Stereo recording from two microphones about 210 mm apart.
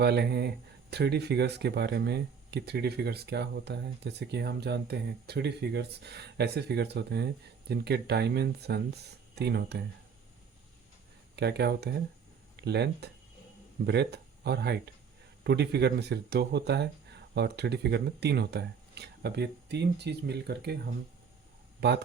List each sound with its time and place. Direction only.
0.0 s speech: 50° right (ahead or behind)
11.3 s speech: 50° right (ahead or behind)
21.8 s speech: 55° right (ahead or behind)